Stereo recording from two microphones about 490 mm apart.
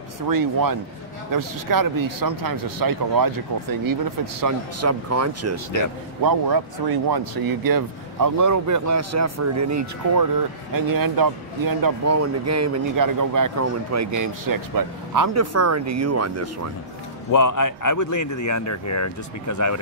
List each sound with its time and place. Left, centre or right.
0.3 s speech: right
6.2 s speech: right
12.1 s speech: right
17.3 s speech: left